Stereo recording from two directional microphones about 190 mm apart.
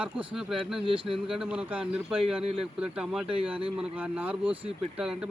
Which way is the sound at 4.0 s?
10° right (ahead or behind).